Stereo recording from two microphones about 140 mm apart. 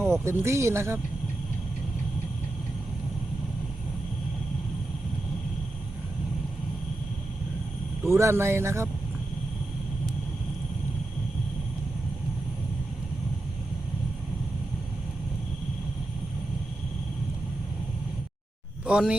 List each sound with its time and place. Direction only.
0.0 s speech: 20° right (ahead or behind)
8.0 s speech: 20° right (ahead or behind)
18.9 s speech: 5° right (ahead or behind)